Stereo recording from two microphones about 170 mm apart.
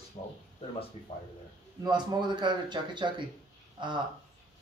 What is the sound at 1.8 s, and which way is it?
A man's voice, 25° right (ahead or behind).